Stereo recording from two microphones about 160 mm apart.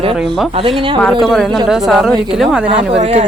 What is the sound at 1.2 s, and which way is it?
Speech, centre (ahead or behind).